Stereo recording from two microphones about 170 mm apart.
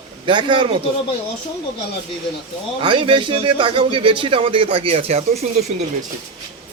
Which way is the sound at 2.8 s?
30° right (ahead or behind).